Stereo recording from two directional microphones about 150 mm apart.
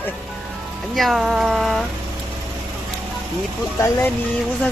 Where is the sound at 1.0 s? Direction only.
Centre (ahead or behind).